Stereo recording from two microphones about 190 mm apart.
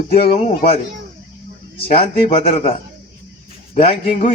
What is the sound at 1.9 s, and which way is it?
Speech, 30° left (ahead or behind).